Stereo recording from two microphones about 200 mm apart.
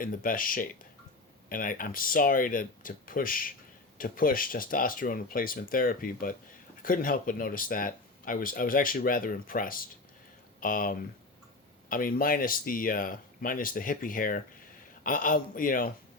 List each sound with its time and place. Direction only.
0.0 s speech: 45° left (ahead or behind)